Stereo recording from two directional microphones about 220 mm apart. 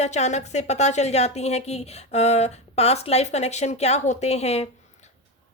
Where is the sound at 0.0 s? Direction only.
30° left (ahead or behind).